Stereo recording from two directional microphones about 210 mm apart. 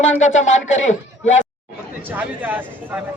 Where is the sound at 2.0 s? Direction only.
10° right (ahead or behind).